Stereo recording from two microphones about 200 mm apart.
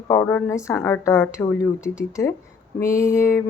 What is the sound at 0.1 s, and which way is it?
Speech, 10° left (ahead or behind).